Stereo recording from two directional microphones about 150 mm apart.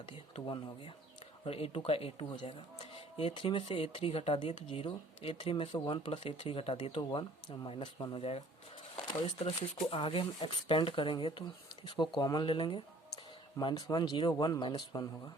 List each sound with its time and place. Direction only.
0.1 s speech: 35° left (ahead or behind)
8.2 s speech: 40° left (ahead or behind)
9.0 s a sound: 30° left (ahead or behind)
9.4 s speech: 50° left (ahead or behind)
9.9 s speech: 40° left (ahead or behind)